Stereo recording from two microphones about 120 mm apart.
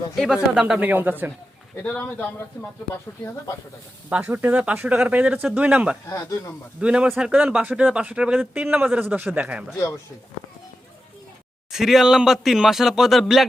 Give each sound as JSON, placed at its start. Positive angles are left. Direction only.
{"t": 0.5, "sound": "a man's voice", "side_deg": -10}
{"t": 1.8, "sound": "speech", "side_deg": 10}
{"t": 4.1, "sound": "a man's voice", "side_deg": -15}
{"t": 6.1, "sound": "speech", "side_deg": 30}
{"t": 6.7, "sound": "a man's voice", "side_deg": -10}
{"t": 11.7, "sound": "speech", "side_deg": -5}